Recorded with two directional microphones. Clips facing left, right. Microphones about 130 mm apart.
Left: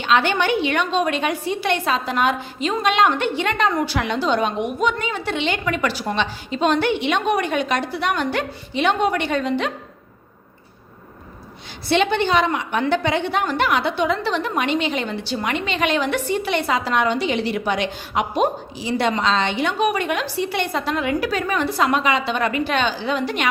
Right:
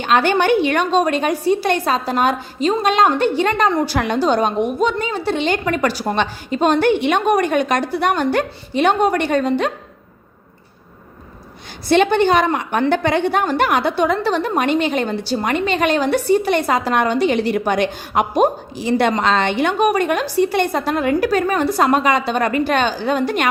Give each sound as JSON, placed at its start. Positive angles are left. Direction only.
{"t": 0.0, "sound": "a woman's voice", "side_deg": -45}
{"t": 11.9, "sound": "a woman's voice", "side_deg": -45}